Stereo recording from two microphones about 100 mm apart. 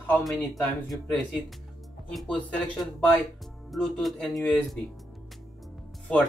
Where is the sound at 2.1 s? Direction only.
Centre (ahead or behind).